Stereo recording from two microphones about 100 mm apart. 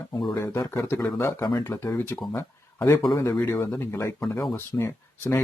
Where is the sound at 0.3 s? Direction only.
30° left (ahead or behind).